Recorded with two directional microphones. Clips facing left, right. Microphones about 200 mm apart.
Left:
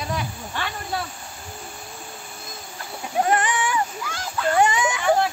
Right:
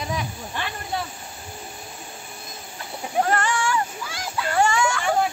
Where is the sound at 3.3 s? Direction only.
20° left (ahead or behind).